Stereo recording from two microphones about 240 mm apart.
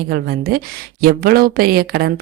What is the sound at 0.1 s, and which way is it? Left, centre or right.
A woman's voice, right.